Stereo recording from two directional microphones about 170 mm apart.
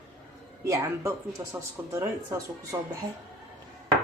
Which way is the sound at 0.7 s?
15° right (ahead or behind).